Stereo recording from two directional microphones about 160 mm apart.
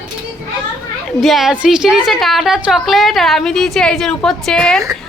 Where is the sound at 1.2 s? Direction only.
Centre (ahead or behind).